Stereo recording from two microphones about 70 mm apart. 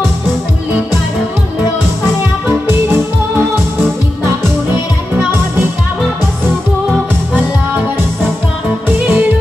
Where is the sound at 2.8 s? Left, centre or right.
Right.